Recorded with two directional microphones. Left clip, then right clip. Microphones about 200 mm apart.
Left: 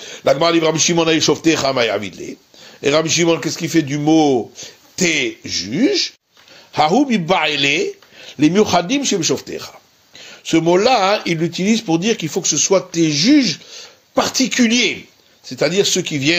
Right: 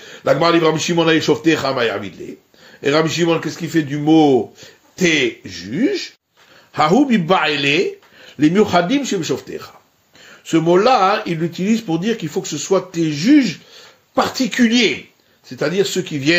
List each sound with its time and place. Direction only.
0.0 s speech: 30° left (ahead or behind)
4.9 s speech: 35° left (ahead or behind)
8.3 s speech: 15° left (ahead or behind)
14.1 s speech: 30° left (ahead or behind)
15.4 s speech: 35° left (ahead or behind)